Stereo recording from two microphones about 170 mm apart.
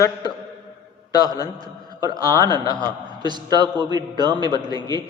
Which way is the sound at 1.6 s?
25° right (ahead or behind).